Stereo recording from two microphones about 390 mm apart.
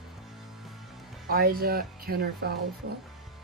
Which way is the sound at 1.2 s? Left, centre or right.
Right.